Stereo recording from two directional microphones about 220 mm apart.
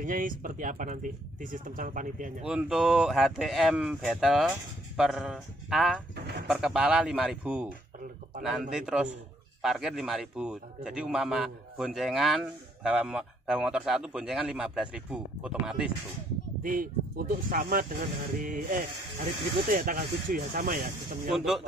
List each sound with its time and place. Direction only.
0.0 s speech: 40° right (ahead or behind)
2.4 s a man's voice: 5° right (ahead or behind)
16.6 s speech: 40° right (ahead or behind)